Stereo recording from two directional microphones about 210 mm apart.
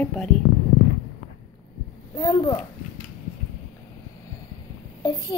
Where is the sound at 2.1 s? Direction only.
20° left (ahead or behind).